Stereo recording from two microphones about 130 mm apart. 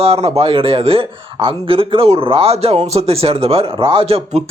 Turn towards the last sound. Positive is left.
turn(degrees=-50)  # may be behind; listen again after turning